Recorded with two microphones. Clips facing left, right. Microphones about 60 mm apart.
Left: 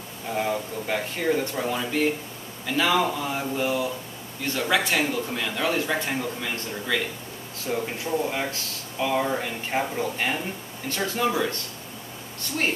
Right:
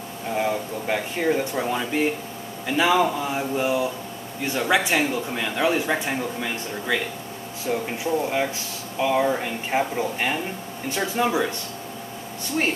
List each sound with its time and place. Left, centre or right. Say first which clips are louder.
0.3 s speech: right 2 dB; centre
12.6 s speech: right 2 dB; centre